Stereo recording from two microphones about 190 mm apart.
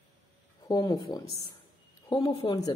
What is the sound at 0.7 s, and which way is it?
A woman's voice, 20° left (ahead or behind).